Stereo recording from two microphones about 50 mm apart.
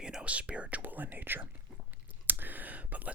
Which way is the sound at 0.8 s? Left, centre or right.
Right.